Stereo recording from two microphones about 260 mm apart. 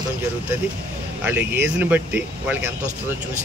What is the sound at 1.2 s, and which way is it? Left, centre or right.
Speech, centre.